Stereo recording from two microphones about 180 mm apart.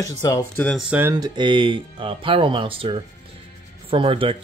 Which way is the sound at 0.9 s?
15° right (ahead or behind).